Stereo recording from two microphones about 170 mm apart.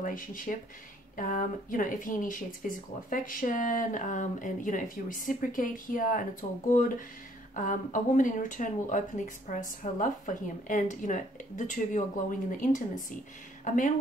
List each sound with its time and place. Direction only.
0.0 s speech: 50° left (ahead or behind)
7.5 s speech: 50° left (ahead or behind)